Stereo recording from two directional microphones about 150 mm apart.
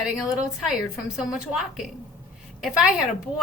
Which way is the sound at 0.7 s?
5° right (ahead or behind).